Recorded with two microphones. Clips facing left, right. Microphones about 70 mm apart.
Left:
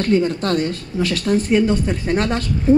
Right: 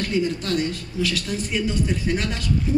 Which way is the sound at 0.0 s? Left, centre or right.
Left.